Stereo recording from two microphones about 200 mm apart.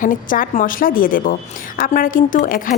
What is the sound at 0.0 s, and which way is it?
A woman's voice, 40° left (ahead or behind).